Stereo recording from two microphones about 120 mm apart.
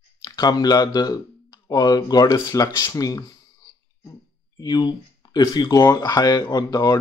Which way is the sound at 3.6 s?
30° left (ahead or behind).